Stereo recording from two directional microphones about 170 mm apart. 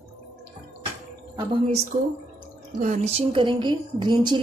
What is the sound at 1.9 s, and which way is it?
A woman's voice, 50° right (ahead or behind).